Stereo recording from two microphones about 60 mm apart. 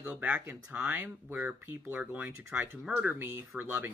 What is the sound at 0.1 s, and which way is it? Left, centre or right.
Speech, right.